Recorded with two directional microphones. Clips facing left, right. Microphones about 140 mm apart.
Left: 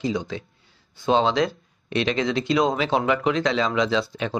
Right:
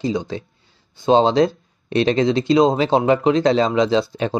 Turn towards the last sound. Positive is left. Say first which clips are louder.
# right 5 dB
turn(degrees=-35)  # may be behind; listen again after turning